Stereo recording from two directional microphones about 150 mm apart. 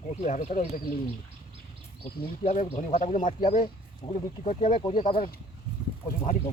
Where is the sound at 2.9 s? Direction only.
55° left (ahead or behind); by 5.3 s 35° left (ahead or behind).